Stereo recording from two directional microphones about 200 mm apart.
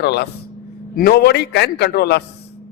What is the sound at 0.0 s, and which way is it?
A man's voice, 55° left (ahead or behind).